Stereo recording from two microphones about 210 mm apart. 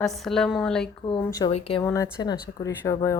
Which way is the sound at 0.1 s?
Centre (ahead or behind).